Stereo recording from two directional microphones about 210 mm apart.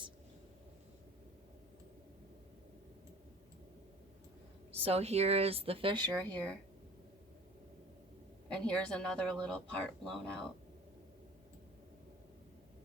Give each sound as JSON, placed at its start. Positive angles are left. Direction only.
{"t": 4.8, "sound": "speech", "side_deg": -30}
{"t": 6.3, "sound": "speech", "side_deg": 5}
{"t": 8.5, "sound": "speech", "side_deg": 5}